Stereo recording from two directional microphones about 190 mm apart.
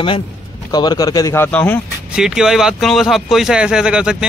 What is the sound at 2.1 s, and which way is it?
Speech, 5° right (ahead or behind).